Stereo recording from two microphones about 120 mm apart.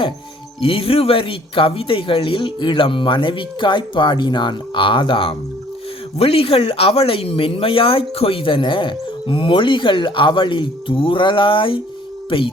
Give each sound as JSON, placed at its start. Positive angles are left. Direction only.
{"t": 0.6, "sound": "speech", "side_deg": 50}